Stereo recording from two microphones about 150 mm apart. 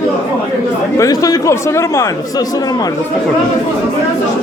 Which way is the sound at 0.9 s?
20° left (ahead or behind).